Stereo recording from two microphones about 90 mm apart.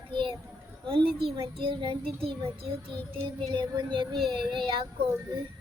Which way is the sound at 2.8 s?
70° right (ahead or behind).